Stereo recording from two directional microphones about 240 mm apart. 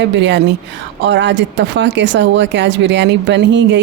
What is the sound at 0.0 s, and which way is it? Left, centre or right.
Speech, right.